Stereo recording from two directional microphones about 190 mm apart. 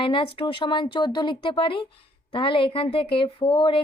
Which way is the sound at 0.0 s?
25° left (ahead or behind).